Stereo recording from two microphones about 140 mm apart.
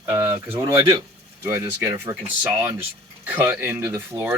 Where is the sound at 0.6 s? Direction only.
25° right (ahead or behind).